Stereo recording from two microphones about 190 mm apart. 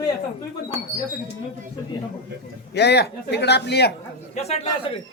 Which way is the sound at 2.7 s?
60° left (ahead or behind).